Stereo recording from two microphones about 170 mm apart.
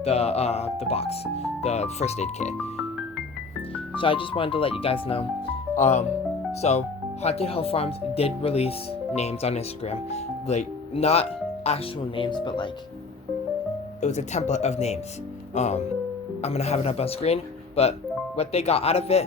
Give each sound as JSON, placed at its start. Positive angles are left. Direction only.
{"t": 0.0, "sound": "speech", "side_deg": 35}
{"t": 3.9, "sound": "speech", "side_deg": 30}
{"t": 14.0, "sound": "speech", "side_deg": 45}